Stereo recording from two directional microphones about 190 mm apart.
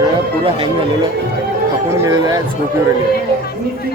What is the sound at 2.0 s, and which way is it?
Speech, 20° right (ahead or behind).